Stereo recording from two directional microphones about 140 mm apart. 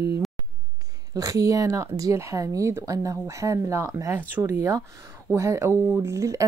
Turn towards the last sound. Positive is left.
turn(degrees=-20)  # may be behind; listen again after turning